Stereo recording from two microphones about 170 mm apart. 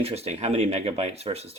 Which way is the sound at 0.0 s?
35° right (ahead or behind).